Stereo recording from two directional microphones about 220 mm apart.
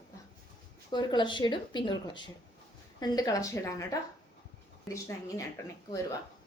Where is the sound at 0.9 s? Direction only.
20° left (ahead or behind).